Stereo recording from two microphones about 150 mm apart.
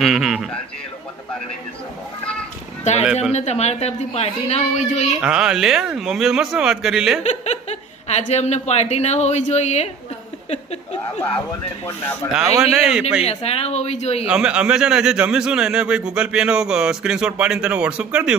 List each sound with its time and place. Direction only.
0.0 s a man's voice: centre (ahead or behind)
2.8 s a man's voice: 50° left (ahead or behind)
5.2 s a man's voice: 5° right (ahead or behind)
8.1 s a man's voice: 50° left (ahead or behind)
11.8 s speech: 15° left (ahead or behind)
12.3 s a man's voice: 5° right (ahead or behind)
13.2 s a man's voice: 45° left (ahead or behind)
14.2 s a man's voice: 5° right (ahead or behind)